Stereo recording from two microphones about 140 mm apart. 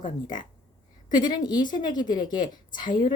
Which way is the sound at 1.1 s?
30° left (ahead or behind).